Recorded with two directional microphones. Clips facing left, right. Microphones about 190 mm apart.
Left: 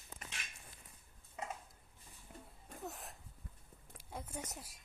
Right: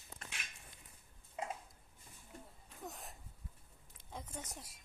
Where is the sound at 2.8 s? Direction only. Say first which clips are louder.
Left 1 dB; centre (ahead or behind).